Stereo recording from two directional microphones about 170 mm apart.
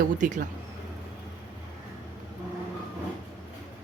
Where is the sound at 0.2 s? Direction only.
50° right (ahead or behind).